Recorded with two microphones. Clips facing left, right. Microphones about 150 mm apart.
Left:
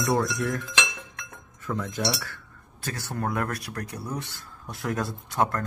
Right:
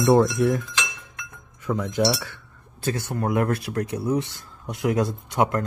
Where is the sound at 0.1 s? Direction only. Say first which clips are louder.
Right 8 dB; 20° right (ahead or behind).